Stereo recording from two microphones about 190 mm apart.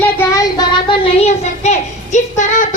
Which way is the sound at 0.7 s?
25° left (ahead or behind).